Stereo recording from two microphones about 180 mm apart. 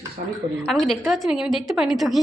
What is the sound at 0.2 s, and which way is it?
Speech, 45° right (ahead or behind).